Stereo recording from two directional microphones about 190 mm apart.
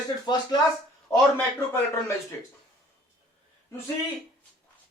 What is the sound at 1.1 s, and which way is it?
A man's voice, 15° left (ahead or behind).